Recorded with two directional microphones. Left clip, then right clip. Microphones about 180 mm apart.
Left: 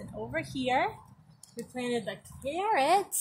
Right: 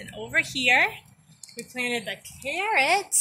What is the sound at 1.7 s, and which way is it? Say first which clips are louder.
A woman's voice: right 5 dB; 20° left (ahead or behind).